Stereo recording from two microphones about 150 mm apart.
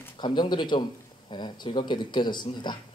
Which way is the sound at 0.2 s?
30° left (ahead or behind).